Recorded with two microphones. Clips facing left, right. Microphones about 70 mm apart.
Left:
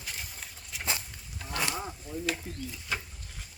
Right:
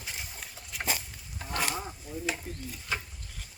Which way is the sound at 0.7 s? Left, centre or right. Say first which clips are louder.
Right 2 dB; centre.